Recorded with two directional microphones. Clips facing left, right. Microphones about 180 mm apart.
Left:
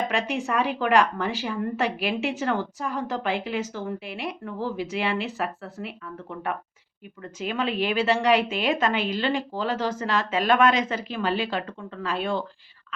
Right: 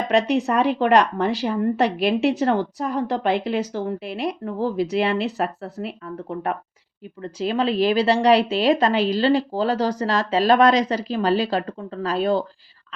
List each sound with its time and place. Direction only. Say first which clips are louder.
0.1 s a woman's voice: right 7 dB; 35° right (ahead or behind)